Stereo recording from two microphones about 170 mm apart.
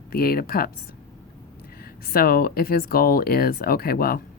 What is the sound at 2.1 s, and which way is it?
Speech, 60° left (ahead or behind).